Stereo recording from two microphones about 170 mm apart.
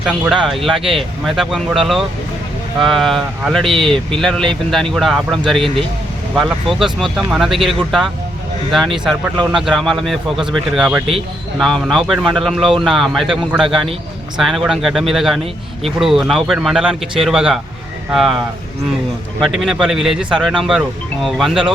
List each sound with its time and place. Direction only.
0.0 s speech: centre (ahead or behind)
19.4 s speech: centre (ahead or behind)